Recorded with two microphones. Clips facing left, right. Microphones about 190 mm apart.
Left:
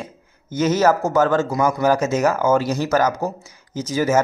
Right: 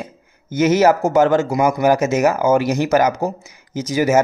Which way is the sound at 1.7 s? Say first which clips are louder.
Right 3 dB; 10° right (ahead or behind).